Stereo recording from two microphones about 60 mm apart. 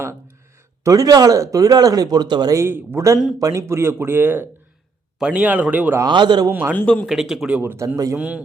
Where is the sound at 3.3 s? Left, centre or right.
Right.